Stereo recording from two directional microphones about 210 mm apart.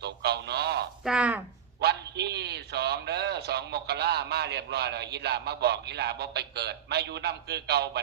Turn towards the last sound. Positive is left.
turn(degrees=-50)  # may be behind; listen again after turning